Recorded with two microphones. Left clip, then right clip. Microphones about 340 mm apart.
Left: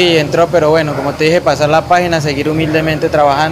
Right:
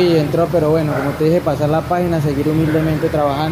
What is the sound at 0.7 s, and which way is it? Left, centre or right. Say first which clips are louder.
Speech: left 4 dB; left.